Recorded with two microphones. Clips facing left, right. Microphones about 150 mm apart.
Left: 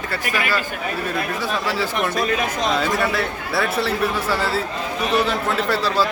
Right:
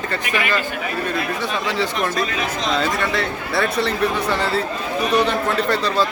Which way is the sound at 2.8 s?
5° left (ahead or behind).